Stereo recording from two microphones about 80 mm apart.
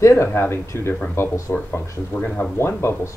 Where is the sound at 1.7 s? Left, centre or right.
Left.